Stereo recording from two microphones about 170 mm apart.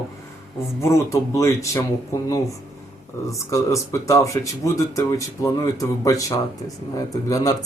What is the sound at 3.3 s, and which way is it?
Speech, 20° left (ahead or behind).